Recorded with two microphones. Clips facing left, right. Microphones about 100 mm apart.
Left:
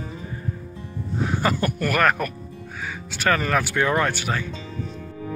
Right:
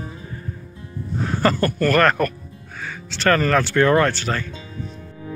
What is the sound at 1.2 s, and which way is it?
Speech, 10° left (ahead or behind).